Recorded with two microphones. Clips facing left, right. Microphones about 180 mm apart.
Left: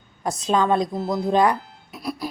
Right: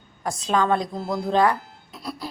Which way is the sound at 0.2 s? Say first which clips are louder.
Left 2 dB; 20° left (ahead or behind).